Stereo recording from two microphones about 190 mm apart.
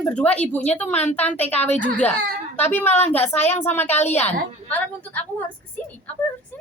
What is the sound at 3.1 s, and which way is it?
Speech, 35° left (ahead or behind).